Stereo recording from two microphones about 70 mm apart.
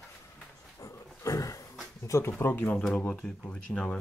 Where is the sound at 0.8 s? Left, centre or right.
Left.